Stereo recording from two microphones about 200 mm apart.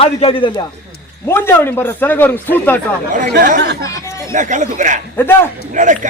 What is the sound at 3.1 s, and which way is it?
Speech, 45° right (ahead or behind).